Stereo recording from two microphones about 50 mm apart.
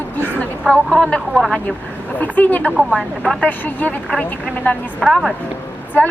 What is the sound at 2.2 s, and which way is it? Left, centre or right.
Speech, left.